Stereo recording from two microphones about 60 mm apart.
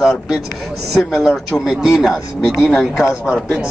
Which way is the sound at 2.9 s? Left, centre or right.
Left.